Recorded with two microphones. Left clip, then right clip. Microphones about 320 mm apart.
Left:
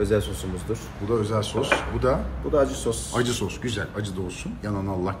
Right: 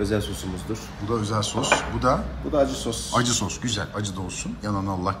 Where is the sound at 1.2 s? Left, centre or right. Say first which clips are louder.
Even; centre.